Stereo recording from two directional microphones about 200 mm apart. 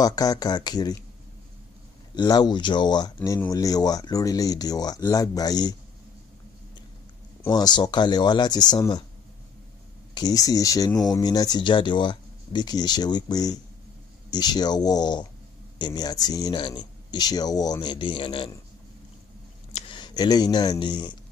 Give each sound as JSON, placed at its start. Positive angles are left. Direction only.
{"t": 0.0, "sound": "speech", "side_deg": 20}
{"t": 2.1, "sound": "speech", "side_deg": 20}
{"t": 7.4, "sound": "speech", "side_deg": 20}
{"t": 10.1, "sound": "speech", "side_deg": 20}
{"t": 19.7, "sound": "speech", "side_deg": 25}